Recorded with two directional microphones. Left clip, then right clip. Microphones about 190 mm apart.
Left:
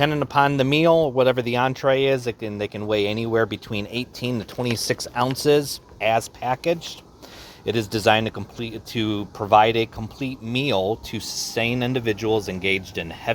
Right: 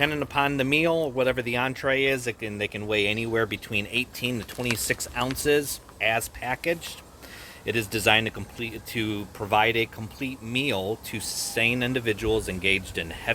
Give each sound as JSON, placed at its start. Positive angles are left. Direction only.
{"t": 0.0, "sound": "speech", "side_deg": 40}